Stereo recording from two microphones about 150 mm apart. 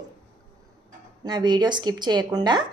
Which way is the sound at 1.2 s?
30° right (ahead or behind).